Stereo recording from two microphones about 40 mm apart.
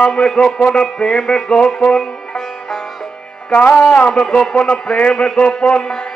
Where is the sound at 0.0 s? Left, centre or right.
Centre.